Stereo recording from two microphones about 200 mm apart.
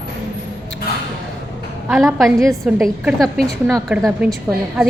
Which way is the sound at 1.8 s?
Centre (ahead or behind).